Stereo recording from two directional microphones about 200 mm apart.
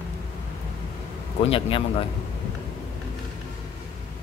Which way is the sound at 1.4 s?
25° left (ahead or behind).